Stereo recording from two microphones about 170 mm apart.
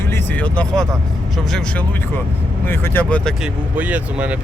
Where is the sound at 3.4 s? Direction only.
10° right (ahead or behind).